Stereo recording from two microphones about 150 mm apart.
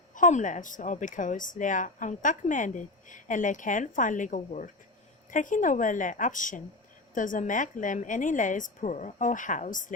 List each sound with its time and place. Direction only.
0.1 s a woman's voice: 55° left (ahead or behind)